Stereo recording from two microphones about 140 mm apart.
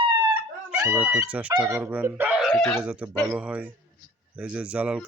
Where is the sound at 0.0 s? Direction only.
40° right (ahead or behind).